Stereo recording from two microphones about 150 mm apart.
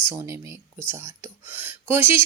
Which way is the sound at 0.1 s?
20° right (ahead or behind).